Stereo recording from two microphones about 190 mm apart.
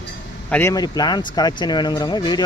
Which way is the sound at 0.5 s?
15° left (ahead or behind).